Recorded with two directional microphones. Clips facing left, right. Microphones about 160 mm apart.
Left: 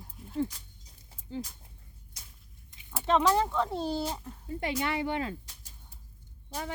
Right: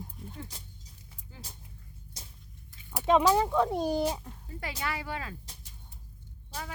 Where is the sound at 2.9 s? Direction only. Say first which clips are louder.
Right 2 dB; 15° right (ahead or behind).